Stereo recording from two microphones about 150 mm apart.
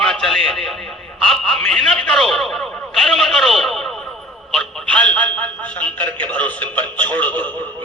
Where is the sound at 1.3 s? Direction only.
5° left (ahead or behind).